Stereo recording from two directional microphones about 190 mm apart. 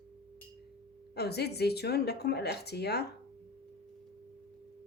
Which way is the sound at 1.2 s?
60° left (ahead or behind).